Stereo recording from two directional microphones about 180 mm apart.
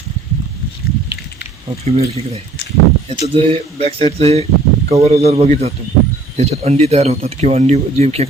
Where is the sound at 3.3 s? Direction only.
35° right (ahead or behind).